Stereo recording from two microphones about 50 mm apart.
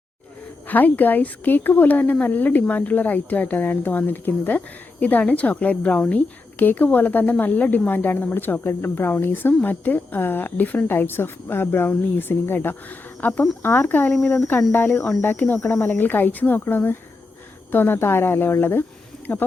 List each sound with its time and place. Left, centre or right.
0.7 s speech: left
19.3 s speech: left